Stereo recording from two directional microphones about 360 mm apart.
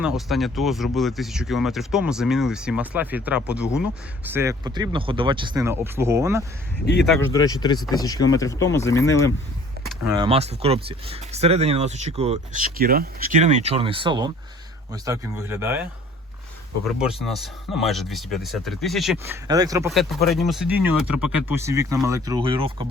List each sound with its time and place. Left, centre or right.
0.0 s speech: centre
7.0 s speech: centre
10.2 s speech: centre
21.1 s speech: left
21.4 s speech: centre